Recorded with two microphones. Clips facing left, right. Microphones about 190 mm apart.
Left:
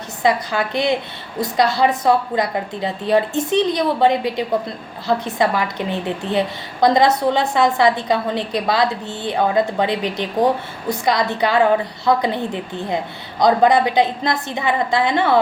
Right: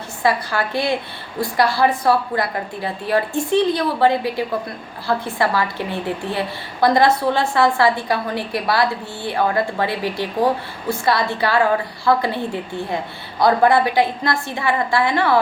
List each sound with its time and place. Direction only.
0.2 s a woman's voice: 20° left (ahead or behind)